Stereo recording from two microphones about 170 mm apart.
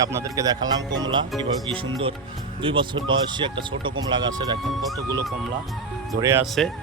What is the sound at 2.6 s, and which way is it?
Speech, 30° right (ahead or behind).